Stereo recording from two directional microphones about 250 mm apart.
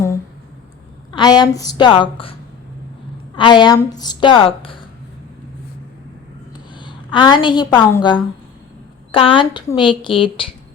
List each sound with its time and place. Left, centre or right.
1.1 s a woman's voice: centre
3.3 s a woman's voice: centre
6.7 s a woman's voice: centre